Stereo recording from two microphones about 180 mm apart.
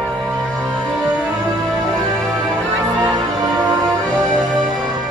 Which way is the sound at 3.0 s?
20° right (ahead or behind).